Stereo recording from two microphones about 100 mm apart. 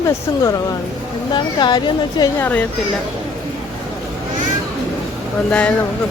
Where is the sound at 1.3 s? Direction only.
45° left (ahead or behind).